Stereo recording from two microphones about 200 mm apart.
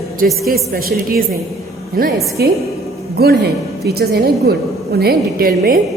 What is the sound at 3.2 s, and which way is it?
A woman's voice, 50° right (ahead or behind).